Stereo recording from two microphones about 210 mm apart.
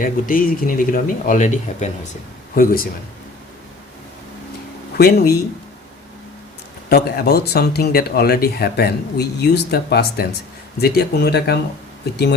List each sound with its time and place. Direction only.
0.0 s speech: 40° left (ahead or behind)
4.9 s speech: 45° left (ahead or behind)
6.9 s speech: 45° left (ahead or behind)